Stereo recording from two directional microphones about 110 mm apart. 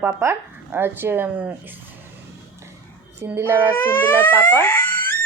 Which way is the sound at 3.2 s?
20° right (ahead or behind).